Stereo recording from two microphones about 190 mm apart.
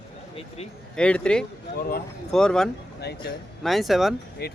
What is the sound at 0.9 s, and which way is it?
Speech, 5° left (ahead or behind).